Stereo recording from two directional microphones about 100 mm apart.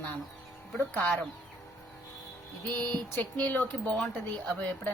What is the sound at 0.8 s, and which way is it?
Speech, 15° left (ahead or behind).